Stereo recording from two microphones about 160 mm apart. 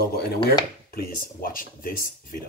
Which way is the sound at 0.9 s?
65° left (ahead or behind).